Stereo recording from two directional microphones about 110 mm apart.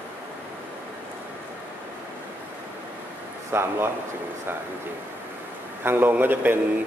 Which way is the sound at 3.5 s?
20° right (ahead or behind).